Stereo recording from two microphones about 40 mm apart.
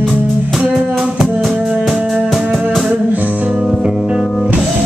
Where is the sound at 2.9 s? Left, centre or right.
Right.